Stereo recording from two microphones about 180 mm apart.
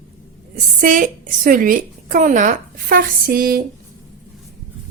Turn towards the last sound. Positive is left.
turn(degrees=-55)  # may be behind; listen again after turning